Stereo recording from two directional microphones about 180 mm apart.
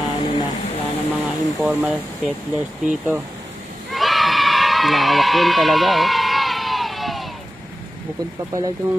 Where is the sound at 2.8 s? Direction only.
10° right (ahead or behind).